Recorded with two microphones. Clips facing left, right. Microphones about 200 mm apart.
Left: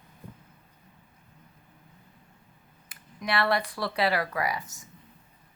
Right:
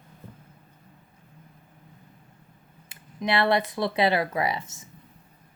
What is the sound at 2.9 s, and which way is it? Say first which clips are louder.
Speech: right 4 dB; 25° right (ahead or behind).